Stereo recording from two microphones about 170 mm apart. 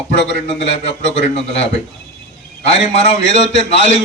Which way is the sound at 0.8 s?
40° left (ahead or behind).